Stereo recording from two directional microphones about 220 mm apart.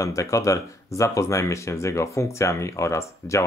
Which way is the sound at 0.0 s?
15° left (ahead or behind).